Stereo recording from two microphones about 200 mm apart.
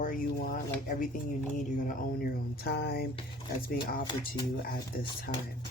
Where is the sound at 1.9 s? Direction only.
50° left (ahead or behind).